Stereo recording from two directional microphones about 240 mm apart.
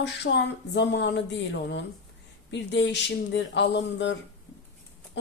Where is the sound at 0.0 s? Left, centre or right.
Left.